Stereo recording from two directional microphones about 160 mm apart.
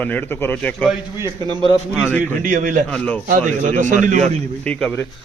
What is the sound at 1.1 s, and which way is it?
Speech, 15° right (ahead or behind).